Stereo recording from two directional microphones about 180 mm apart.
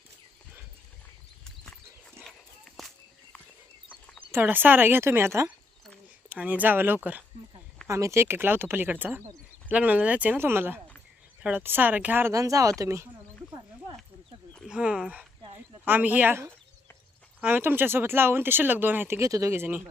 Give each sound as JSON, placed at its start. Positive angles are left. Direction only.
{"t": 4.3, "sound": "speech", "side_deg": -10}
{"t": 14.7, "sound": "speech", "side_deg": -5}